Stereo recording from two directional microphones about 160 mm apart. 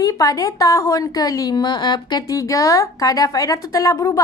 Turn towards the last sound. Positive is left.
turn(degrees=20)  # may be behind; listen again after turning